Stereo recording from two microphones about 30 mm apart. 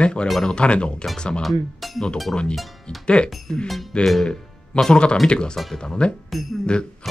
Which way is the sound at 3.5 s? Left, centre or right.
Left.